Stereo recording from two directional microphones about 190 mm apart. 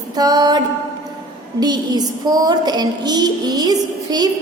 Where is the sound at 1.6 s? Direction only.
20° right (ahead or behind).